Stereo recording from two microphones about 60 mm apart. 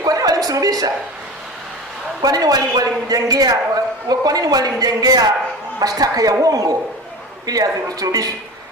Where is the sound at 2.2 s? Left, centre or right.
Right.